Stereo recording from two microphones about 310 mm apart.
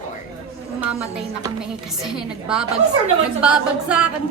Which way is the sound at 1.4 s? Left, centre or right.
Centre.